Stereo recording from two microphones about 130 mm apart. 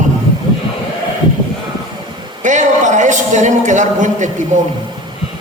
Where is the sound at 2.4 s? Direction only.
75° right (ahead or behind).